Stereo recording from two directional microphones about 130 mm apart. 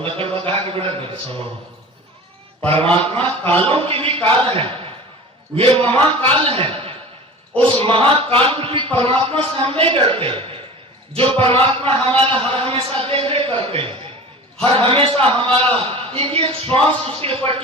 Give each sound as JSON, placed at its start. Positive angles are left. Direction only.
{"t": 0.0, "sound": "a man's voice", "side_deg": -45}
{"t": 2.6, "sound": "a man's voice", "side_deg": -45}